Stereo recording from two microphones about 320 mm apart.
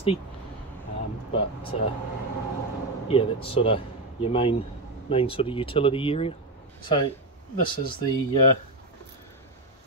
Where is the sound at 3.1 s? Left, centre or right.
Centre.